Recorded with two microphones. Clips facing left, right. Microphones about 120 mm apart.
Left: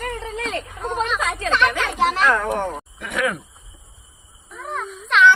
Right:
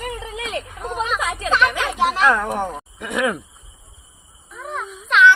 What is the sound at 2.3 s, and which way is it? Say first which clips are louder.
Speech: left 1 dB; 10° right (ahead or behind).